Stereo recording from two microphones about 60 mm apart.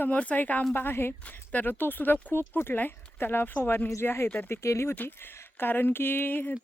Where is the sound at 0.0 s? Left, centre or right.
Left.